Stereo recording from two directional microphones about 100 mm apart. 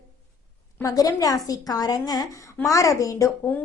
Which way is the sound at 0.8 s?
35° left (ahead or behind).